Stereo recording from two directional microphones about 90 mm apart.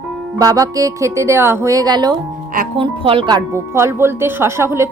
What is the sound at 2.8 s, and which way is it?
Speech, 80° right.